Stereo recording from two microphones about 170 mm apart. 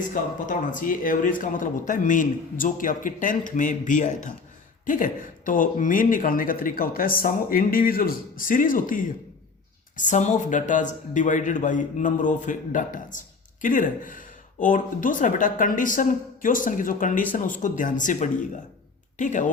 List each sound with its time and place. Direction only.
0.1 s a man's voice: 50° left (ahead or behind)